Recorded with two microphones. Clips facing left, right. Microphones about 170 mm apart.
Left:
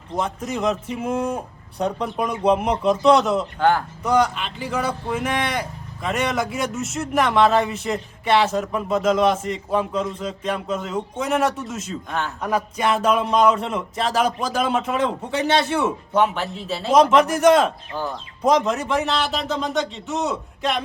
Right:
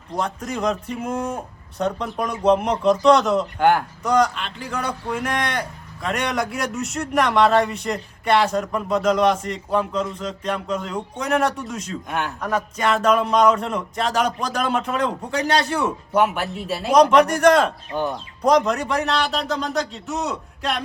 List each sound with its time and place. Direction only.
0.2 s a man's voice: 5° left (ahead or behind)
3.6 s speech: 15° right (ahead or behind)
4.0 s a man's voice: 5° left (ahead or behind)
17.9 s speech: 20° right (ahead or behind)
18.4 s a man's voice: centre (ahead or behind)